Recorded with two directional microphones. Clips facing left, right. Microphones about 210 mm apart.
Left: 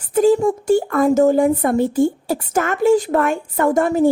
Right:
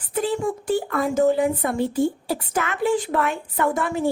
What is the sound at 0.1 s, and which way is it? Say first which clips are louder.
Speech: left 9 dB; 45° left (ahead or behind).